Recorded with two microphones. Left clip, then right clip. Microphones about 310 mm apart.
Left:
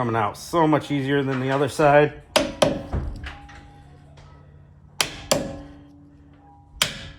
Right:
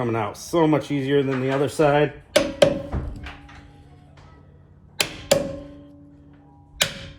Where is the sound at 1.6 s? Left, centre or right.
Left.